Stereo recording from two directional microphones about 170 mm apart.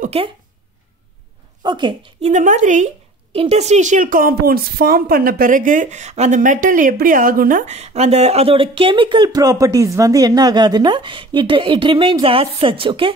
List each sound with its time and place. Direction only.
0.0 s a sound: 35° right (ahead or behind)
1.6 s speech: 25° right (ahead or behind)
2.2 s a woman's voice: 45° right (ahead or behind)